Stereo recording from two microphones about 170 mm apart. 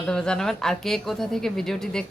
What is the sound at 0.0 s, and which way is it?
A woman's voice, 5° left (ahead or behind).